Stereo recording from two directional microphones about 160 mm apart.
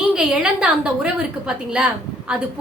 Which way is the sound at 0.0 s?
5° right (ahead or behind).